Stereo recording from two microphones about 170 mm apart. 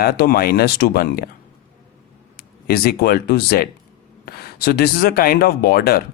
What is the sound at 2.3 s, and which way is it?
Speech, 65° left (ahead or behind).